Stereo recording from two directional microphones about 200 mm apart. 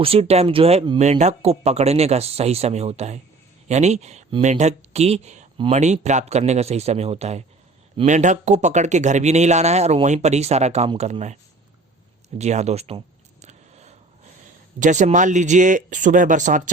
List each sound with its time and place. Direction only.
0.0 s speech: 30° right (ahead or behind)
12.4 s speech: 35° right (ahead or behind)
13.4 s a sound: 35° right (ahead or behind)
14.8 s speech: 40° right (ahead or behind)